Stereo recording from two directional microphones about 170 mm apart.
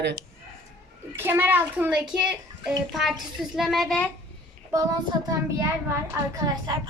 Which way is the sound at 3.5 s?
Centre (ahead or behind).